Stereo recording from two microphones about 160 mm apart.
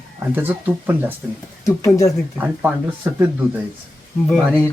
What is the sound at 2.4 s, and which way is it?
Speech, 10° right (ahead or behind).